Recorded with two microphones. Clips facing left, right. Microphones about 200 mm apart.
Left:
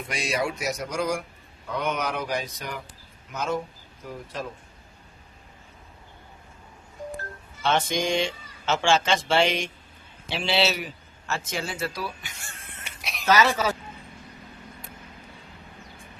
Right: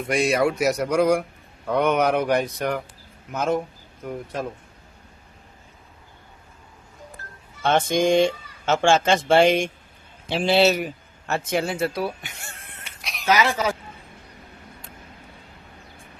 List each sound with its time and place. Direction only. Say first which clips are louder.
0.1 s speech: right 8 dB; 55° right (ahead or behind)
7.6 s a man's voice: right 5 dB; 50° right (ahead or behind)
13.0 s a sound: even; centre (ahead or behind)
13.2 s speech: even; 15° right (ahead or behind)